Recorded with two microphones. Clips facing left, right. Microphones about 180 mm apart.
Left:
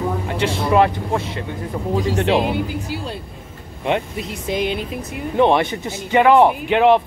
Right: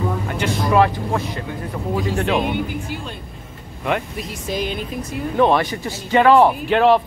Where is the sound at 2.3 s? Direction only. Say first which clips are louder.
Left 2 dB; 35° left (ahead or behind).